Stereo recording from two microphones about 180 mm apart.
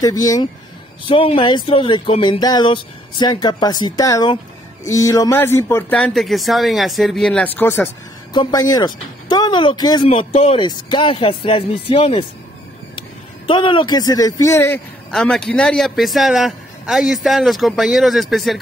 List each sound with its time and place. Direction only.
0.0 s speech: 20° left (ahead or behind)
1.0 s speech: 30° left (ahead or behind); by 7.9 s 10° left (ahead or behind)
8.3 s speech: 25° left (ahead or behind)
13.5 s speech: 30° left (ahead or behind)
15.0 s speech: 5° left (ahead or behind)